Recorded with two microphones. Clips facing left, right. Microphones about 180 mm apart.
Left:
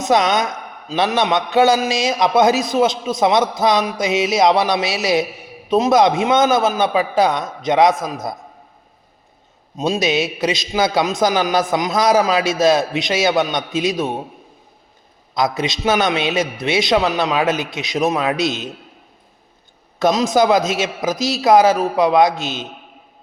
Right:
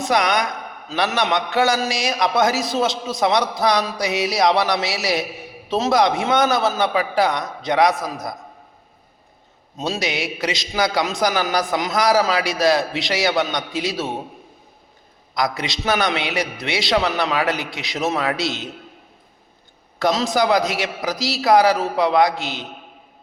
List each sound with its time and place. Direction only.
0.0 s a man's voice: 20° left (ahead or behind)
9.7 s a man's voice: 20° left (ahead or behind)
15.4 s a man's voice: 20° left (ahead or behind)
20.0 s a man's voice: 20° left (ahead or behind)